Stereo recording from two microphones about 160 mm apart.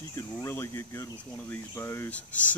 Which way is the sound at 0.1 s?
15° left (ahead or behind).